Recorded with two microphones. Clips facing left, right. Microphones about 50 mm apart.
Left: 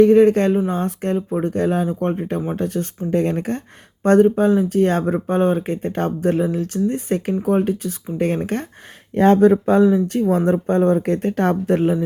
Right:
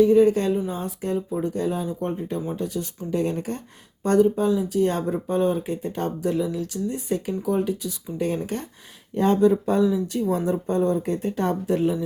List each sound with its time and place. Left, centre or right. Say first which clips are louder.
0.0 s speech: left 5 dB; left